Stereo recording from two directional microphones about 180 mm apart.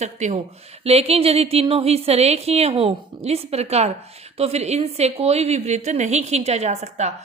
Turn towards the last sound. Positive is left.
turn(degrees=-40)  # may be behind; listen again after turning